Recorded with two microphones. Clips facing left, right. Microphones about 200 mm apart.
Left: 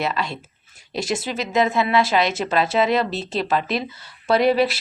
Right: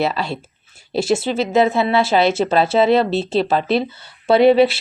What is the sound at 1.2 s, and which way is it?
A woman's voice, 30° right (ahead or behind).